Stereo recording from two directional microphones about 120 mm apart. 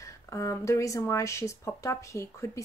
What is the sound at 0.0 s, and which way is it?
A woman's voice, 25° left (ahead or behind).